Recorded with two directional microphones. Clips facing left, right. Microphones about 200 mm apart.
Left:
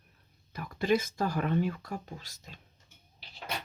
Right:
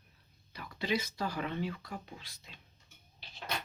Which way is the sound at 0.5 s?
50° left (ahead or behind).